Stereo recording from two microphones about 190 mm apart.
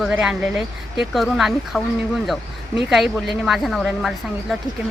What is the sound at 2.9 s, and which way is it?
Speech, centre (ahead or behind).